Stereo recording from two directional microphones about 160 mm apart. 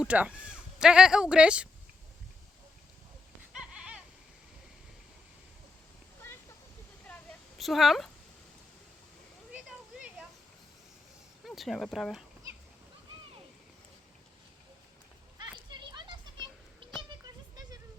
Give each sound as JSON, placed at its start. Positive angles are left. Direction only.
{"t": 0.0, "sound": "speech", "side_deg": -5}
{"t": 3.5, "sound": "goat", "side_deg": -5}
{"t": 7.1, "sound": "a sound", "side_deg": 5}
{"t": 11.4, "sound": "speech", "side_deg": 0}
{"t": 15.5, "sound": "children playing", "side_deg": -30}
{"t": 17.2, "sound": "a sound", "side_deg": -25}